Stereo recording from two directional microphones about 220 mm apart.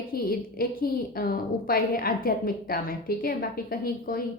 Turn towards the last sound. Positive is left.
turn(degrees=40)  # may be behind; listen again after turning